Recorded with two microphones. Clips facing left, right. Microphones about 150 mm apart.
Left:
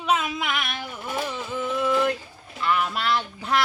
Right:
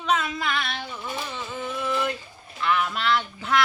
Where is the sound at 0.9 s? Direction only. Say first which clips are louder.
Left 3 dB; 55° left (ahead or behind).